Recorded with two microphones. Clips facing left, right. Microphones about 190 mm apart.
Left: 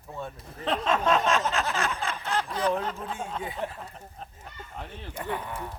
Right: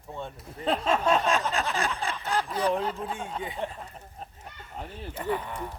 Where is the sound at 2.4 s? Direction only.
5° right (ahead or behind).